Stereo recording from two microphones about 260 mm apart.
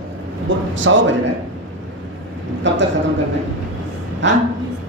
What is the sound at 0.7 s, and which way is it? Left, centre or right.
Speech, right.